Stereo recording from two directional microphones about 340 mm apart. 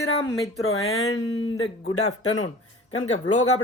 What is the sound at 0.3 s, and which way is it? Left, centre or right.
Speech, centre.